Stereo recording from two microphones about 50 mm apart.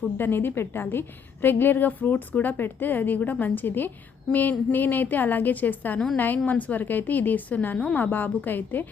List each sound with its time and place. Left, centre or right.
0.2 s a woman's voice: left